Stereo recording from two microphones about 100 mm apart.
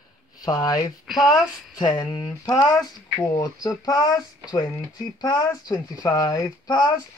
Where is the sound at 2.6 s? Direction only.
35° left (ahead or behind).